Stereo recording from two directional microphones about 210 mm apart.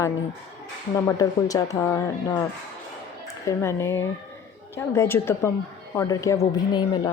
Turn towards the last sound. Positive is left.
turn(degrees=20)  # may be behind; listen again after turning